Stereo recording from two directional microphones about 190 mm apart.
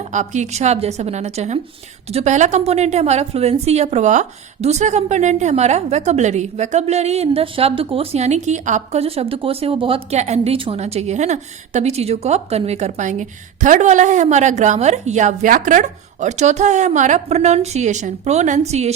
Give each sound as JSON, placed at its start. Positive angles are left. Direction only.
{"t": 0.1, "sound": "a woman's voice", "side_deg": -40}